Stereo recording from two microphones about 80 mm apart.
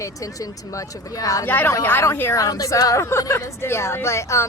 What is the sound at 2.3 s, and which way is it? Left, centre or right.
A woman's voice, left.